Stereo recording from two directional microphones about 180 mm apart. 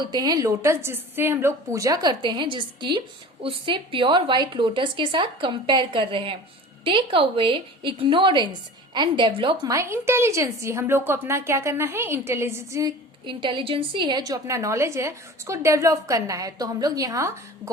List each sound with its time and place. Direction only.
0.0 s a woman's voice: 20° right (ahead or behind)
9.7 s a woman's voice: 15° right (ahead or behind)